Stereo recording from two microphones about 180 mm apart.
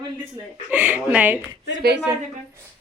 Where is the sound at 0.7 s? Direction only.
10° right (ahead or behind).